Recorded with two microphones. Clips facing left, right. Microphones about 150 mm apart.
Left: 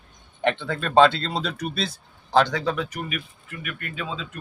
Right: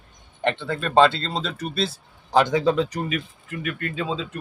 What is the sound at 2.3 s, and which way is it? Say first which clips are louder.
A man's voice: right 2 dB; 15° right (ahead or behind).